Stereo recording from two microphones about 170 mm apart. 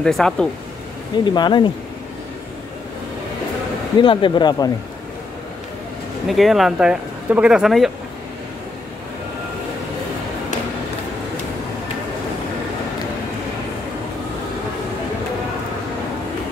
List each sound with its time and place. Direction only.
0.0 s speech: 5° left (ahead or behind)
1.2 s speech: 25° left (ahead or behind)
4.0 s speech: 30° left (ahead or behind)
6.2 s speech: centre (ahead or behind)